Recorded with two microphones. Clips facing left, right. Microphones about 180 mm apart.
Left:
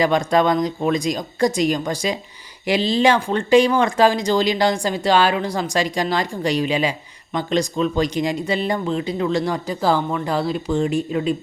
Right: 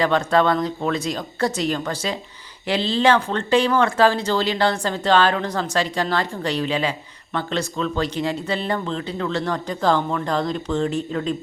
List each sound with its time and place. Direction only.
0.0 s speech: 15° left (ahead or behind)